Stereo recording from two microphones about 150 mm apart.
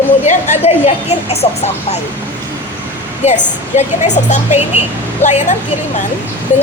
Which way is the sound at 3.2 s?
50° left (ahead or behind).